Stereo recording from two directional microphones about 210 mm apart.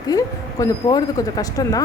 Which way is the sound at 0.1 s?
15° left (ahead or behind).